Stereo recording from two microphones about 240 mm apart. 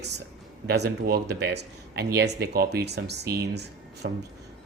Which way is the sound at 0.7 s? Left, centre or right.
Right.